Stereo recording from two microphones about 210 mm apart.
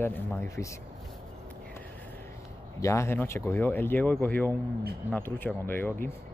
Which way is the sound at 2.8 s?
15° left (ahead or behind).